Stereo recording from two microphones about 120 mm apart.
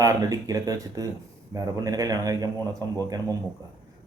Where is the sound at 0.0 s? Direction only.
30° right (ahead or behind).